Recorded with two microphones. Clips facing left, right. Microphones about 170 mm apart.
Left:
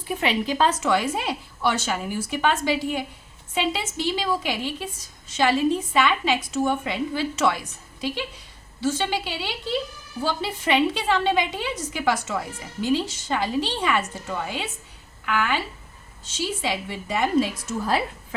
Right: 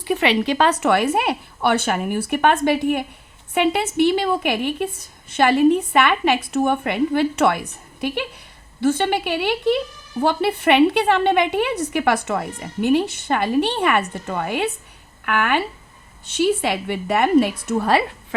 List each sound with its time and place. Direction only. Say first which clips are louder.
0.0 s a woman's voice: right 6 dB; 75° right (ahead or behind)